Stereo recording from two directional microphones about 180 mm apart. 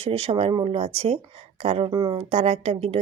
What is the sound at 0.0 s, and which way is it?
Speech, 35° right (ahead or behind).